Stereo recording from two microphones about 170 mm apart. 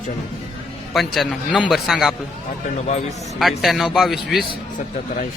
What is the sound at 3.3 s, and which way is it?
A man's voice, centre (ahead or behind).